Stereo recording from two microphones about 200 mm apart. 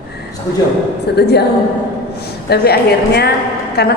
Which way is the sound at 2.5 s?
55° left (ahead or behind).